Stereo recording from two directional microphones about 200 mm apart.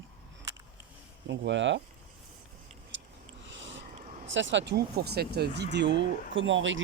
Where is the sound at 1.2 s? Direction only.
65° right (ahead or behind).